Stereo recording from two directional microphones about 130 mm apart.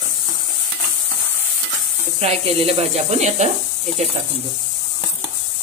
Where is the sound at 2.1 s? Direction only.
50° right (ahead or behind).